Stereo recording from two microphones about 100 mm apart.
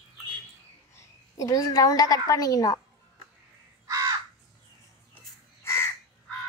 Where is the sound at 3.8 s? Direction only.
30° right (ahead or behind).